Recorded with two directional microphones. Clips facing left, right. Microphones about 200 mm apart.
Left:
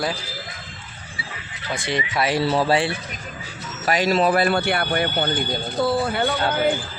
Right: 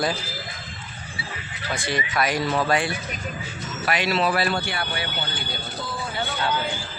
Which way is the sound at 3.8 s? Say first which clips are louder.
Left 4 dB; 40° left (ahead or behind).